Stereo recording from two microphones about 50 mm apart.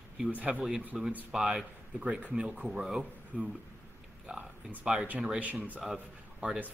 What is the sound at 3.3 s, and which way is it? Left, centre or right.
Speech, right.